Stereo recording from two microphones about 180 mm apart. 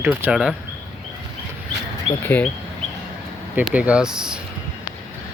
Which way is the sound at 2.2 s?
10° left (ahead or behind).